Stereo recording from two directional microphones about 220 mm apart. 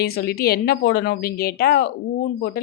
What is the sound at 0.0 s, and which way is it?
Speech, 45° left (ahead or behind).